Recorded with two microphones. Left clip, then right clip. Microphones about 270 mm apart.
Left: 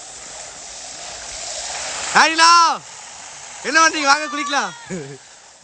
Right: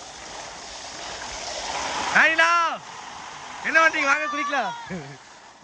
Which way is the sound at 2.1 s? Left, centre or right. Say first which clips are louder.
Left 6 dB; centre.